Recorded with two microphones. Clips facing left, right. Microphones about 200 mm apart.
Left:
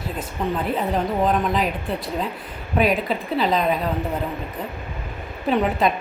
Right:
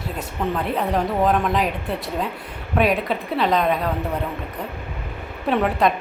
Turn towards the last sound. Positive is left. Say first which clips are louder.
# right 1 dB
turn(degrees=0)  # may be behind; listen again after turning